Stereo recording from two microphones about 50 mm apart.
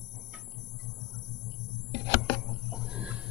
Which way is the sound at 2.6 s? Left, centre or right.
Centre.